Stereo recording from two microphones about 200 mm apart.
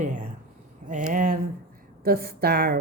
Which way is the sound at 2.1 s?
50° right (ahead or behind).